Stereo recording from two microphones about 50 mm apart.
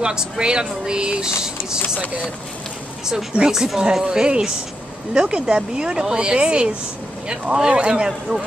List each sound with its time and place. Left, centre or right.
0.0 s speech: centre
3.3 s speech: centre
4.0 s speech: centre